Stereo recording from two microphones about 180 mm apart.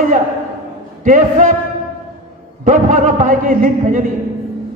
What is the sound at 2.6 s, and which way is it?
A man's voice, 45° right (ahead or behind).